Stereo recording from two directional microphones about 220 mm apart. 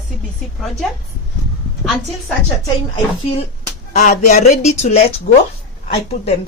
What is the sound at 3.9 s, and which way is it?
A woman's voice, 35° left (ahead or behind).